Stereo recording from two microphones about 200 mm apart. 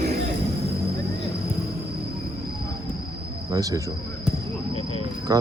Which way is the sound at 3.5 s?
15° right (ahead or behind).